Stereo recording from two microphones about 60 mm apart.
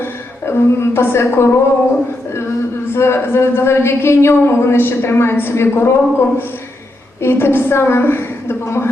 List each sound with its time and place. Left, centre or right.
0.0 s a woman's voice: left
2.9 s a man's voice: left